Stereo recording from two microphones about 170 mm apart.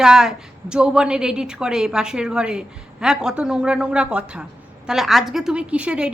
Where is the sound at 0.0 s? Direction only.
5° right (ahead or behind).